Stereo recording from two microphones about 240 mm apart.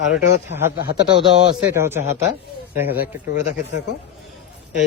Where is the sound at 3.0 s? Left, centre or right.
Left.